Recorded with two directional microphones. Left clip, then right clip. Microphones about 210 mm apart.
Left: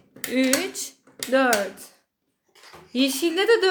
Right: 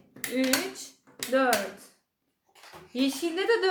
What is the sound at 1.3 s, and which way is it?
Speech, 50° left (ahead or behind).